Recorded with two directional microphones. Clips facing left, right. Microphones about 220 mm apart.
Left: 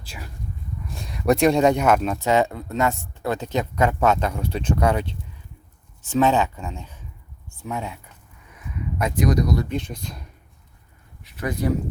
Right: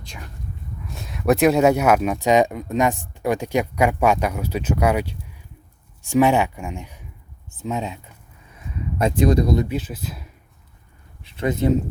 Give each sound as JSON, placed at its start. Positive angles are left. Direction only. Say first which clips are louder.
{"t": 0.0, "sound": "speech", "louder": "even", "side_deg": 5}
{"t": 9.6, "sound": "speech", "louder": "right 1 dB", "side_deg": -5}
{"t": 11.2, "sound": "speech", "louder": "right 4 dB", "side_deg": -25}